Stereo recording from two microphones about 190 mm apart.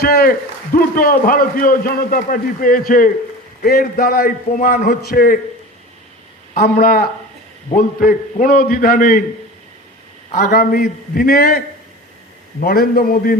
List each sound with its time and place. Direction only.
0.0 s a man's voice: 50° left (ahead or behind)
6.5 s a man's voice: 50° left (ahead or behind)
10.3 s a man's voice: 55° left (ahead or behind)